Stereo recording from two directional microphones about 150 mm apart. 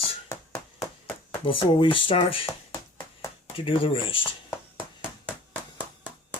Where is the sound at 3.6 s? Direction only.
35° left (ahead or behind).